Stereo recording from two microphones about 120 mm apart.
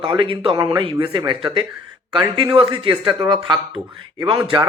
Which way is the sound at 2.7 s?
45° right (ahead or behind).